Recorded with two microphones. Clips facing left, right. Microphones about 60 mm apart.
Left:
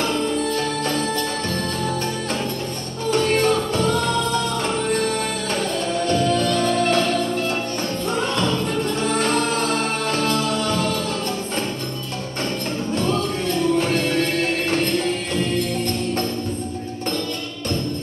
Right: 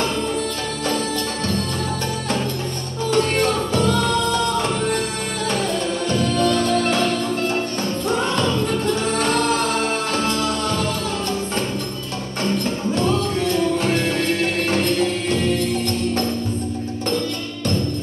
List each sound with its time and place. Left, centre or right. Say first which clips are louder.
3.1 s music: left 1 dB; centre
6.0 s music: even; centre
8.1 s music: right 2 dB; centre
13.7 s music: even; centre